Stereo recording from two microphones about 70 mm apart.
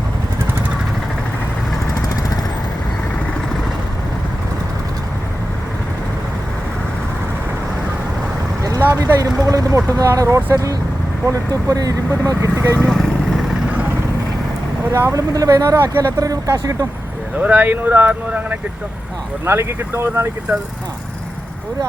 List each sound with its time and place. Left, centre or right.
9.0 s a sound: right
10.2 s speech: right
12.9 s vehicle: centre
14.9 s speech: right
15.3 s speech: right
17.3 s speech: centre
19.5 s speech: right